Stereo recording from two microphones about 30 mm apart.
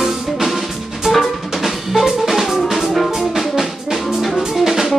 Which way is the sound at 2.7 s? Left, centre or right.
Centre.